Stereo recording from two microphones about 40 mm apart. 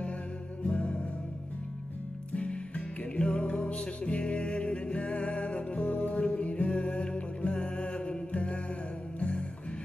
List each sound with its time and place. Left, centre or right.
0.7 s music: left
2.3 s music: left